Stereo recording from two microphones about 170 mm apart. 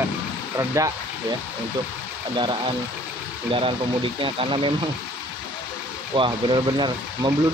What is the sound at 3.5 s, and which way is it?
Speech, 30° right (ahead or behind).